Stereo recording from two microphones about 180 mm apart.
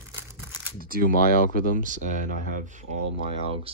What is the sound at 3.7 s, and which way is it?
Speech, 30° right (ahead or behind).